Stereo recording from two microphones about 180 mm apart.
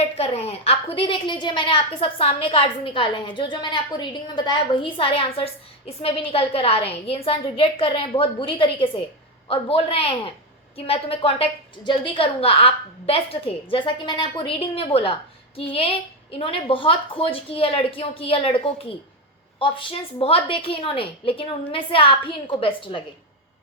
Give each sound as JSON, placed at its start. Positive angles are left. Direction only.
{"t": 0.0, "sound": "a woman's voice", "side_deg": 35}